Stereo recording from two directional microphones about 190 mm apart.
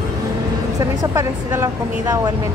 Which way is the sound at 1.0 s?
15° right (ahead or behind).